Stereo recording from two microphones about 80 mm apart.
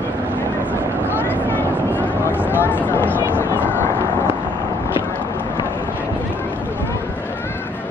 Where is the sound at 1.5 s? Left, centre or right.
Left.